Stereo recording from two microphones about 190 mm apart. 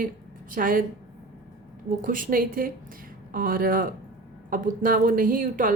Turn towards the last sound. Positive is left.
turn(degrees=-45)  # may be behind; listen again after turning